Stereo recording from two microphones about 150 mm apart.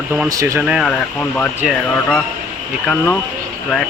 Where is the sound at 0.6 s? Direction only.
5° right (ahead or behind).